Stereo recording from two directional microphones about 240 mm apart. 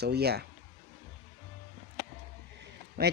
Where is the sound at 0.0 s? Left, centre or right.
Right.